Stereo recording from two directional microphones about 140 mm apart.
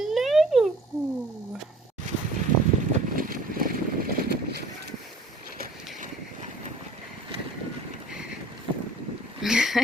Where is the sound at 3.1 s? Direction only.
90° right.